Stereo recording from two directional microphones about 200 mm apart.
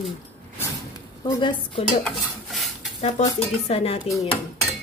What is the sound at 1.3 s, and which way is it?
Speech, 20° left (ahead or behind).